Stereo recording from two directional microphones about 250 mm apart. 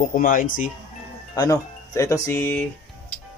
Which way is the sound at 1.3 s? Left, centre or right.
Centre.